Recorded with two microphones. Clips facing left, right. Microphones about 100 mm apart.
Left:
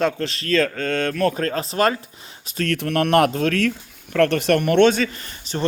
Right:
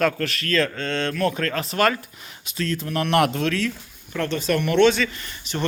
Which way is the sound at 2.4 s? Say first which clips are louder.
Left 3 dB; 45° left (ahead or behind).